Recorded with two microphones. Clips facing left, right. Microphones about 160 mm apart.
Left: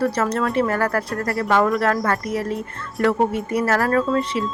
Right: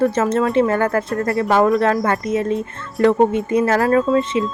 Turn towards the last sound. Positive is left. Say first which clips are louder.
# right 4 dB
turn(degrees=-20)  # may be behind; listen again after turning